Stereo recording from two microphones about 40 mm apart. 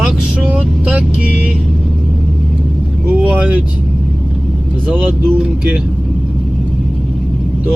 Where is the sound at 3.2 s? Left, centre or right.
Right.